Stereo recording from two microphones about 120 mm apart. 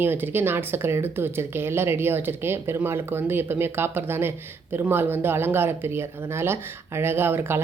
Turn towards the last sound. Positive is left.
turn(degrees=-20)  # may be behind; listen again after turning